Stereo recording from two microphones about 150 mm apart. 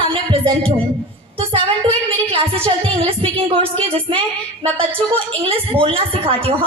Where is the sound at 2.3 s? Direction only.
35° right (ahead or behind).